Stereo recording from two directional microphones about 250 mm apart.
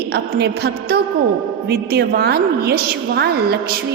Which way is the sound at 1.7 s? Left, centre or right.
Right.